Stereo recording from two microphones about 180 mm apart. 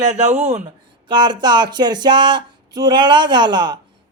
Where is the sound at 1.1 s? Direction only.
25° right (ahead or behind).